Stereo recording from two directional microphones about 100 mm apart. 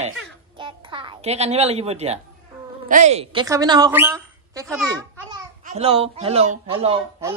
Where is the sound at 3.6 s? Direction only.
45° right (ahead or behind).